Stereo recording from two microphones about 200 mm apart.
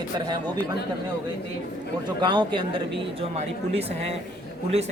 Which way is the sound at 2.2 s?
25° right (ahead or behind).